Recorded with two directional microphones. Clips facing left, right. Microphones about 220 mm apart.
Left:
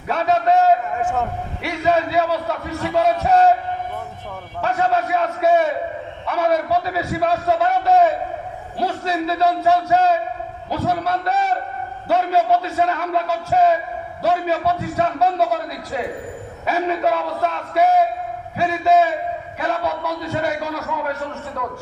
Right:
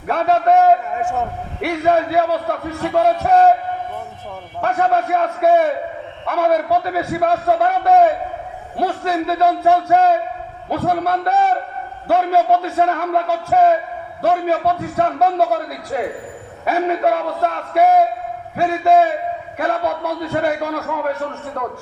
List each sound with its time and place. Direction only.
0.1 s a sound: 55° right (ahead or behind)
1.6 s a man's voice: 55° right (ahead or behind)
4.6 s a man's voice: 55° right (ahead or behind)
16.6 s a man's voice: 55° right (ahead or behind)